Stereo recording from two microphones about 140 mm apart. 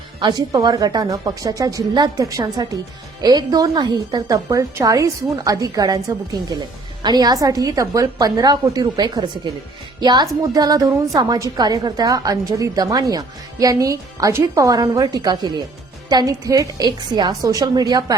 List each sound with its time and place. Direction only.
0.2 s a woman's voice: 30° right (ahead or behind)